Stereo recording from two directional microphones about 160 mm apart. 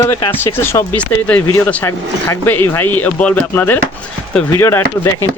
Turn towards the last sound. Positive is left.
turn(degrees=15)  # may be behind; listen again after turning